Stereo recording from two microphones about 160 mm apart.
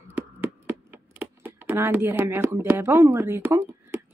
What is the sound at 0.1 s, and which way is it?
Speech, 10° right (ahead or behind).